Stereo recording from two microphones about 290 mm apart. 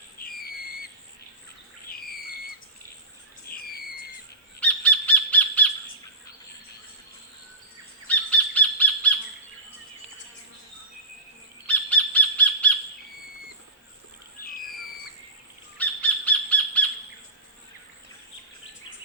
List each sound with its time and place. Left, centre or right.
3.5 s bird: left
4.6 s bird: centre
8.0 s bird: centre
11.6 s squawk: centre
15.8 s bird: centre